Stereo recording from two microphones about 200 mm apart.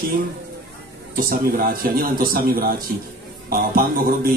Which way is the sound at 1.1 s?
45° right (ahead or behind).